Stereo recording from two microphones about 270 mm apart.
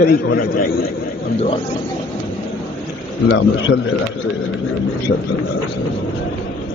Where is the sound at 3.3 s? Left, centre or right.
Left.